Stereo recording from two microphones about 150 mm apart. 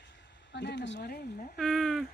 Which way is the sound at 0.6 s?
90° left.